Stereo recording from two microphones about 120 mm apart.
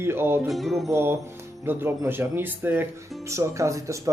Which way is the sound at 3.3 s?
25° right (ahead or behind).